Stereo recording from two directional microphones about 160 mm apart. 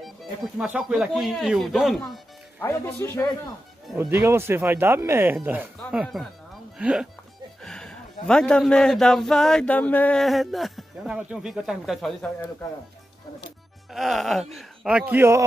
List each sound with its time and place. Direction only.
0.0 s a man's voice: centre (ahead or behind)
2.6 s speech: 15° left (ahead or behind)
4.0 s speech: 15° right (ahead or behind)
5.9 s a man's voice: centre (ahead or behind)
7.6 s a man's voice: 5° left (ahead or behind)
13.9 s a man's voice: centre (ahead or behind)